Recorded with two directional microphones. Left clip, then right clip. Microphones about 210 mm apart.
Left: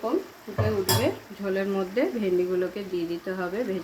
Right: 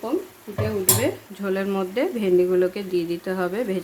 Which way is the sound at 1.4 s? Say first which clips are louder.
Right 3 dB; 35° right (ahead or behind).